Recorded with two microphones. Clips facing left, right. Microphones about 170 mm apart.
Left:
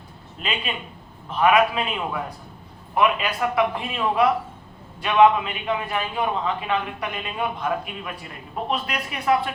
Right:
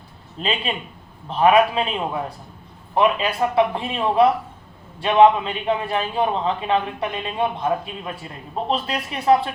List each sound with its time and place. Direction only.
0.3 s a man's voice: 30° right (ahead or behind)